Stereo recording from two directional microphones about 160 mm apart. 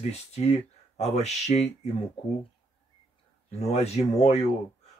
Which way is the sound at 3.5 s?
40° left (ahead or behind).